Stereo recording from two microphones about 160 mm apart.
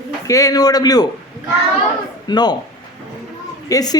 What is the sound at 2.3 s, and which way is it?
Speech, 25° left (ahead or behind).